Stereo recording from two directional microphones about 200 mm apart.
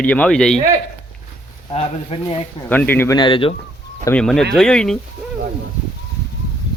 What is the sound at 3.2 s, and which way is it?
Speech, 25° left (ahead or behind).